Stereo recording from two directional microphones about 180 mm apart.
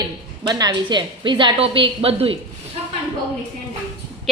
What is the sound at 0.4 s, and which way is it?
A woman's voice, 25° right (ahead or behind).